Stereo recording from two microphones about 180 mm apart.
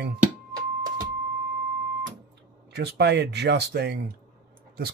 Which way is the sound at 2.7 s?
70° right (ahead or behind).